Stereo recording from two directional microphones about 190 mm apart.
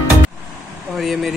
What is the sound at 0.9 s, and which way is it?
Vehicle, centre (ahead or behind).